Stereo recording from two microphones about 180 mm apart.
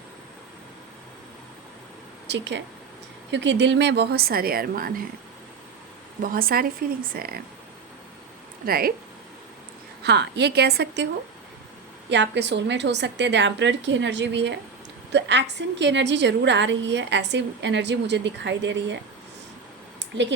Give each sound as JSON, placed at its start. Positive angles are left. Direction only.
{"t": 2.2, "sound": "a woman's voice", "side_deg": -75}
{"t": 6.2, "sound": "a woman's voice", "side_deg": -55}
{"t": 8.6, "sound": "a woman's voice", "side_deg": -55}
{"t": 10.0, "sound": "a woman's voice", "side_deg": -70}
{"t": 20.1, "sound": "a woman's voice", "side_deg": -85}